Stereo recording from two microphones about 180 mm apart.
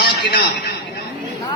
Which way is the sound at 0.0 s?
65° left (ahead or behind).